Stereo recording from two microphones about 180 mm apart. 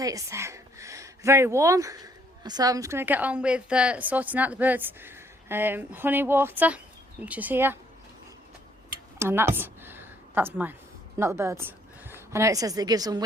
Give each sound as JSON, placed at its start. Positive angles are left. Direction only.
{"t": 0.0, "sound": "speech", "side_deg": -20}
{"t": 9.1, "sound": "a sound", "side_deg": -15}
{"t": 11.2, "sound": "a woman's voice", "side_deg": -15}